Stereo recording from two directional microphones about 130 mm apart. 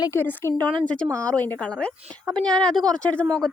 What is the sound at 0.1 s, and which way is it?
Speech, 20° left (ahead or behind).